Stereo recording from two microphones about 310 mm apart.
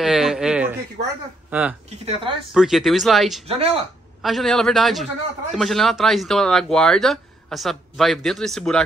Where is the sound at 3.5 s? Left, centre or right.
Centre.